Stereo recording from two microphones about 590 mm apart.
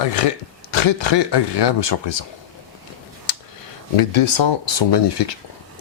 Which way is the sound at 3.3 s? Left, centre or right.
Left.